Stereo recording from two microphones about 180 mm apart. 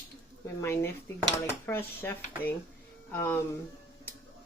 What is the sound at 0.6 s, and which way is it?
Speech, 15° left (ahead or behind).